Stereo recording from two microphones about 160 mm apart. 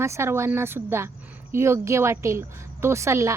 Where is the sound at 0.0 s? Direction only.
15° right (ahead or behind).